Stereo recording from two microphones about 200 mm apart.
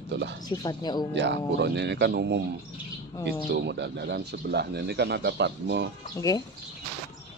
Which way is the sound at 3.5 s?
60° right (ahead or behind).